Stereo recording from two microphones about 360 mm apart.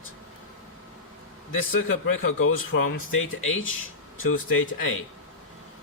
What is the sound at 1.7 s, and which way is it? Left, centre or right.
A man's voice, left.